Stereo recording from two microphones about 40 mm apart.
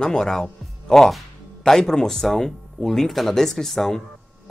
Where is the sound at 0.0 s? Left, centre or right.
Centre.